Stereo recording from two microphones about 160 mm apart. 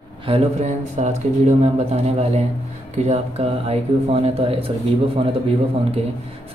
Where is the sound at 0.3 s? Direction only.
45° right (ahead or behind).